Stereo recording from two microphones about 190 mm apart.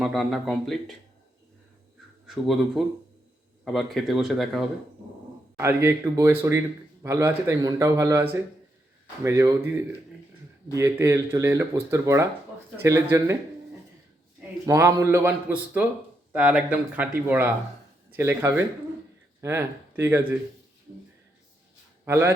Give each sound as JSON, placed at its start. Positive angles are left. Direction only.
{"t": 0.0, "sound": "speech", "side_deg": 0}
{"t": 2.2, "sound": "speech", "side_deg": 0}
{"t": 5.5, "sound": "speech", "side_deg": -15}
{"t": 10.8, "sound": "speech", "side_deg": -15}
{"t": 14.7, "sound": "speech", "side_deg": -15}
{"t": 22.0, "sound": "speech", "side_deg": -15}